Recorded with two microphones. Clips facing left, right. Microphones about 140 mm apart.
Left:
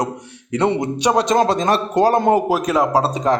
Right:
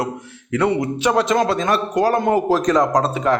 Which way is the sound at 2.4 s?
10° left (ahead or behind).